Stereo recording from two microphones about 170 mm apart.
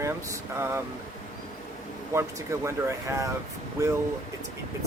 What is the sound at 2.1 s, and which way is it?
Speech, 15° right (ahead or behind).